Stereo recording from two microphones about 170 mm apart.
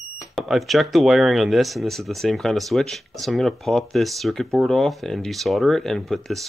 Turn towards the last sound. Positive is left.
turn(degrees=0)  # may be behind; listen again after turning